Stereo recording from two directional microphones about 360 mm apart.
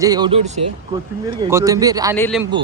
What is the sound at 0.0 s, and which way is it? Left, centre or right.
Speech, centre.